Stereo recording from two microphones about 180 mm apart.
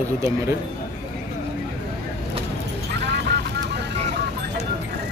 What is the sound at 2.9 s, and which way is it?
Vehicle, 70° right (ahead or behind).